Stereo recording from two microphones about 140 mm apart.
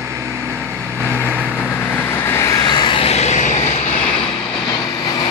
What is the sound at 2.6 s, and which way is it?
Vehicle, 35° left (ahead or behind).